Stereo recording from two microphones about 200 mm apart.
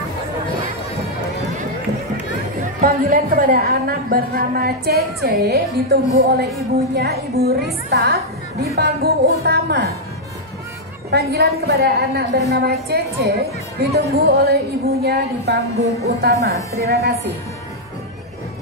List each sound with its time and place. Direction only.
2.8 s a woman's voice: 45° right (ahead or behind)
11.1 s a woman's voice: 55° right (ahead or behind)